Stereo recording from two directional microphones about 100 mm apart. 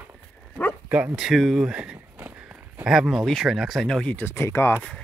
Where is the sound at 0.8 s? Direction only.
15° right (ahead or behind); by 4.3 s 10° left (ahead or behind).